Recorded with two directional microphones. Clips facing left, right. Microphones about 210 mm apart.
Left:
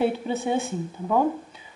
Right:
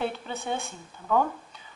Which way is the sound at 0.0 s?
5° left (ahead or behind).